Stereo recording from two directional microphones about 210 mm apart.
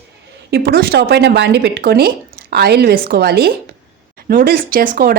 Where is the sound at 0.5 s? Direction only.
45° right (ahead or behind).